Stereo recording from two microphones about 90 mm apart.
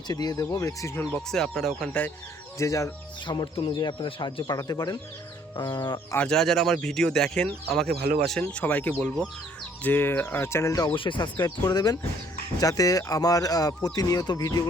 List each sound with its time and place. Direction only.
0.1 s speech: 45° left (ahead or behind)
0.4 s speech: 35° left (ahead or behind)
0.9 s speech: 20° left (ahead or behind)
1.3 s speech: 5° left (ahead or behind)
2.6 s speech: 35° left (ahead or behind)
3.2 s speech: 60° left (ahead or behind)
4.5 s speech: 45° left (ahead or behind)
6.1 s speech: 5° left (ahead or behind); by 10.8 s 35° left (ahead or behind)
10.8 s speech: 70° left (ahead or behind); by 14.6 s 45° left (ahead or behind)